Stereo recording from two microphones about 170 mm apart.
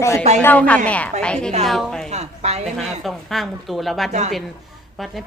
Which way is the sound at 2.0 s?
40° right (ahead or behind).